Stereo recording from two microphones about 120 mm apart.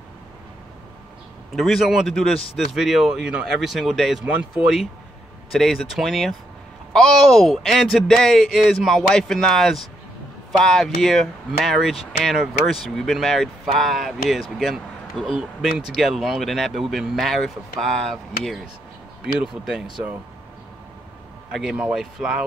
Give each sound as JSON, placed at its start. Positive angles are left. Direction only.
{"t": 1.5, "sound": "speech", "side_deg": 0}
{"t": 21.5, "sound": "speech", "side_deg": -5}